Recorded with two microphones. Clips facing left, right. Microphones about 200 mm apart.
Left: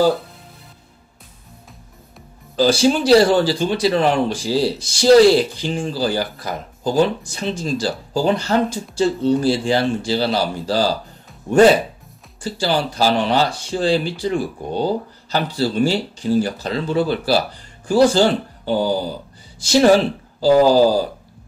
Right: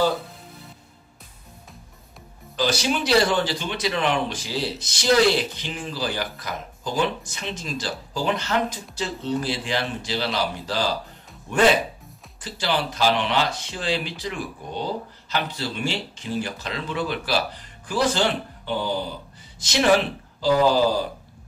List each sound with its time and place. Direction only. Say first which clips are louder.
2.5 s speech: left 8 dB; 30° left (ahead or behind)